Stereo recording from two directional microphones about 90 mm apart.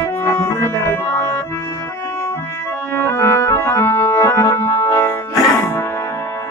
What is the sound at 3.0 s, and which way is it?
Music, 30° left (ahead or behind).